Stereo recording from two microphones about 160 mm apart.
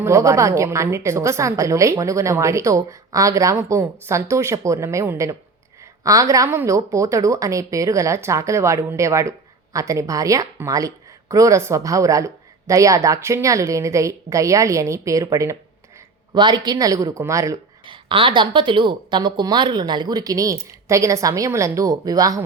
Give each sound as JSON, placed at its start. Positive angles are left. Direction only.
{"t": 0.0, "sound": "a woman's voice", "side_deg": -20}
{"t": 17.8, "sound": "a woman's voice", "side_deg": -30}